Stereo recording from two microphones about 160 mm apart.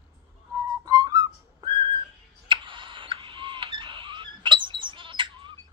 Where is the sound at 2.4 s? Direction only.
30° right (ahead or behind).